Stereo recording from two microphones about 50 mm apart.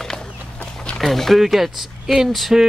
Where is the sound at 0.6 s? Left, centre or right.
Left.